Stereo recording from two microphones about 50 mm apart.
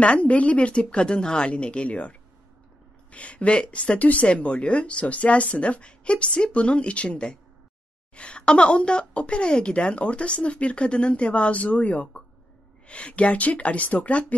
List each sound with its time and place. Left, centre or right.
0.0 s speech: left